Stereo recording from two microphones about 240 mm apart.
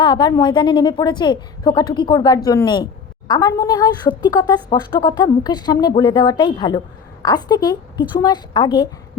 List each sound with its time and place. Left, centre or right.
0.0 s a woman's voice: centre